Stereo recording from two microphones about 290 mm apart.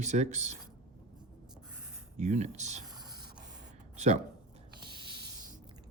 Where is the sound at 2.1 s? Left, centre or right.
Right.